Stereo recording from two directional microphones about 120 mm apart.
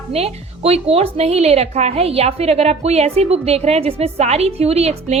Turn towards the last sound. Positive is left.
turn(degrees=-60)  # may be behind; listen again after turning